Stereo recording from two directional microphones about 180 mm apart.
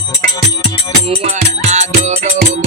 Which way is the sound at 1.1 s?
40° right (ahead or behind).